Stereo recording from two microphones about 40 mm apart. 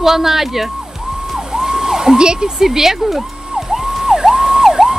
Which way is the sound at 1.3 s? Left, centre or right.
Centre.